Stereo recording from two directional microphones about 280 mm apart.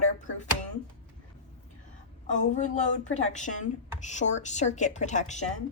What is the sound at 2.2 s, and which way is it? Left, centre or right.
A woman's voice, left.